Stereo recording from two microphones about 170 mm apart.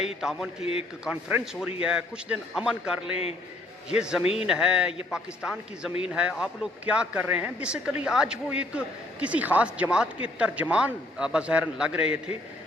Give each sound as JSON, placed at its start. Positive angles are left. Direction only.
{"t": 0.2, "sound": "speech", "side_deg": 0}
{"t": 0.6, "sound": "a man's voice", "side_deg": 35}
{"t": 1.0, "sound": "a man's voice", "side_deg": -5}